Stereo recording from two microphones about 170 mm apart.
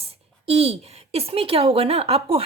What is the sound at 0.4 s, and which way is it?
A woman's voice, 35° right (ahead or behind).